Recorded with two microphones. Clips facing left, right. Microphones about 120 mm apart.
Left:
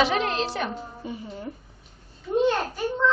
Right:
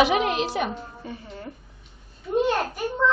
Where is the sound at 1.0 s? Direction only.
15° left (ahead or behind).